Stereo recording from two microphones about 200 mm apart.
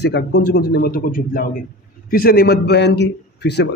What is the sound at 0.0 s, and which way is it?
A man's voice, 55° left (ahead or behind).